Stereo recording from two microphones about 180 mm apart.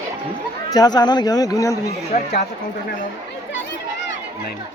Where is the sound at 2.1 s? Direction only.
45° left (ahead or behind).